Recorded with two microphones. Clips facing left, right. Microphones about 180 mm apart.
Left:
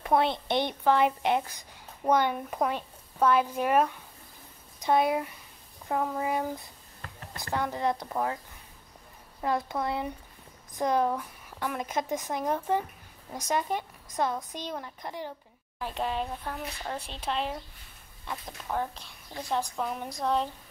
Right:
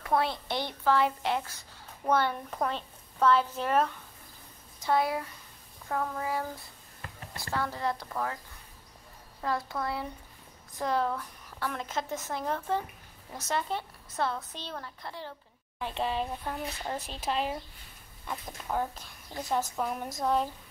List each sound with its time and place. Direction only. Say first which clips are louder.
0.0 s a woman's voice: left 3 dB; 20° left (ahead or behind)
9.4 s a woman's voice: left 3 dB; 20° left (ahead or behind)
15.8 s speech: even; centre (ahead or behind)